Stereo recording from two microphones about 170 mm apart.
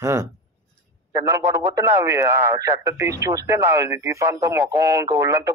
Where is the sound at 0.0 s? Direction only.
15° right (ahead or behind).